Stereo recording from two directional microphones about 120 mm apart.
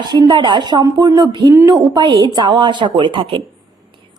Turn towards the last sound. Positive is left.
turn(degrees=-45)  # may be behind; listen again after turning